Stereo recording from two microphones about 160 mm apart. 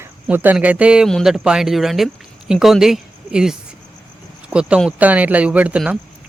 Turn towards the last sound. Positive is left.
turn(degrees=-10)  # may be behind; listen again after turning